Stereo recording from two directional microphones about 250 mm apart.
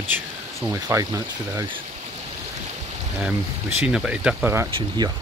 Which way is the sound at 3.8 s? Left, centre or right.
Centre.